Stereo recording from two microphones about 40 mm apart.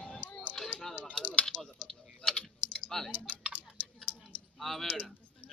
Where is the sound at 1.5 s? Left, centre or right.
Left.